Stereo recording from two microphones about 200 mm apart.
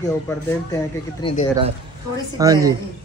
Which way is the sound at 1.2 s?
25° left (ahead or behind).